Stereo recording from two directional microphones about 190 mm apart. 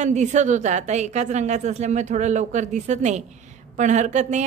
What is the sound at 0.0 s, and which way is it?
A woman's voice, 40° right (ahead or behind).